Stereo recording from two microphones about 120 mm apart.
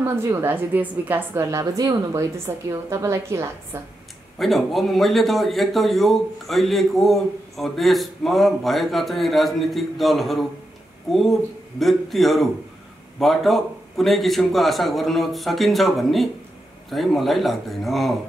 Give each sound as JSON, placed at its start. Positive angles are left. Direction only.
{"t": 0.0, "sound": "a woman's voice", "side_deg": -20}
{"t": 4.4, "sound": "a man's voice", "side_deg": 0}